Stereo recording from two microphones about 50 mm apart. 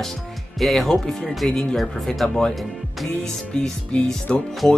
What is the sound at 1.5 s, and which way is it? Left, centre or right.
Speech, centre.